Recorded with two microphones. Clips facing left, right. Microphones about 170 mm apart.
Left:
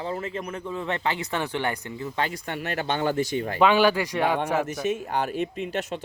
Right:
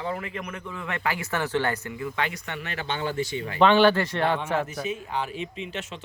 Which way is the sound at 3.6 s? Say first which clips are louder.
Right 2 dB; 10° left (ahead or behind).